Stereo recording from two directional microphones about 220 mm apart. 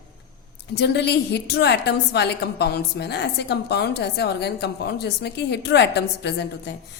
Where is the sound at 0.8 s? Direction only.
50° left (ahead or behind).